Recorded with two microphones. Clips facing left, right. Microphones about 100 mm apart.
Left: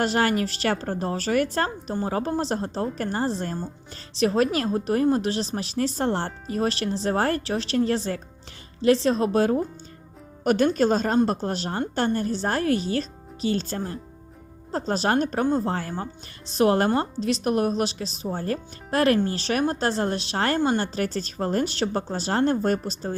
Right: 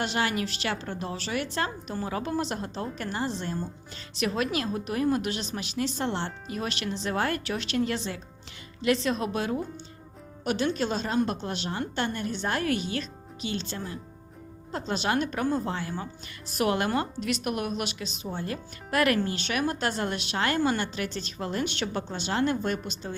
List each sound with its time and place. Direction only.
0.0 s a woman's voice: 40° left (ahead or behind)